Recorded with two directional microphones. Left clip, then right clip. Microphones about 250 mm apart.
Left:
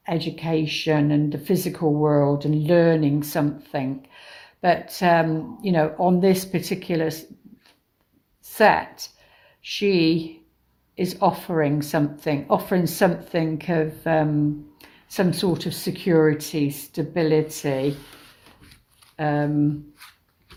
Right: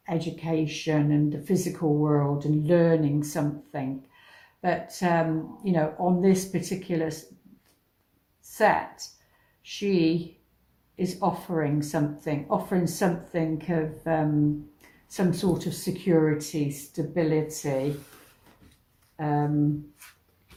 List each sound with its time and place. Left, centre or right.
0.0 s speech: left
8.5 s speech: left
19.1 s speech: left